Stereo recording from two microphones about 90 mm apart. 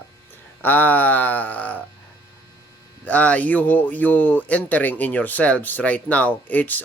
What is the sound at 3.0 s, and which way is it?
Speech, 15° left (ahead or behind).